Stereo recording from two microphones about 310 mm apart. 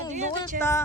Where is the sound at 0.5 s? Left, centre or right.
Right.